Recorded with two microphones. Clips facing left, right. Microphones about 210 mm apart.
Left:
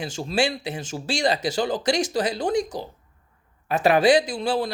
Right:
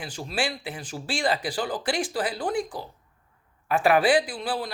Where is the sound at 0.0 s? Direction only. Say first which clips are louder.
Left 6 dB; 25° left (ahead or behind).